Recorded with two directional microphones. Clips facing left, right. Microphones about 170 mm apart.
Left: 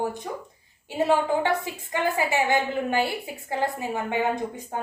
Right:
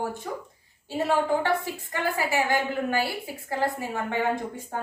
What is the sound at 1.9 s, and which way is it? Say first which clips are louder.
A woman's voice: left 3 dB; 20° left (ahead or behind).